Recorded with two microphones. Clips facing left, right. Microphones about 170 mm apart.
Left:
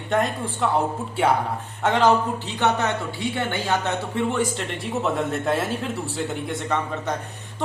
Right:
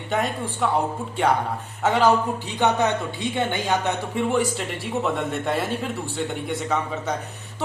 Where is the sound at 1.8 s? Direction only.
5° right (ahead or behind).